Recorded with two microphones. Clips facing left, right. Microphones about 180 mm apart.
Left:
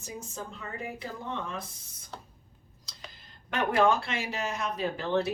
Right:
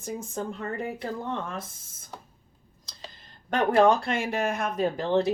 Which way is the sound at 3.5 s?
40° right (ahead or behind).